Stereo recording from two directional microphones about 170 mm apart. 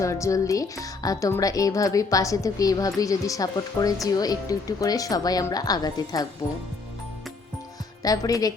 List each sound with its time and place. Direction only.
0.0 s speech: 20° left (ahead or behind)
8.0 s speech: 20° left (ahead or behind)